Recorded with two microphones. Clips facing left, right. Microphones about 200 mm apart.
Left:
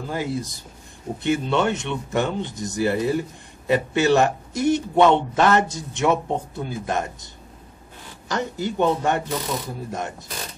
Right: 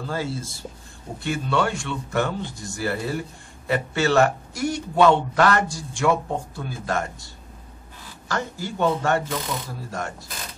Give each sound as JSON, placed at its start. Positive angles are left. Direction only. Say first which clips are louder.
{"t": 0.0, "sound": "speech", "louder": "left 2 dB", "side_deg": 15}
{"t": 8.3, "sound": "speech", "louder": "left 3 dB", "side_deg": 20}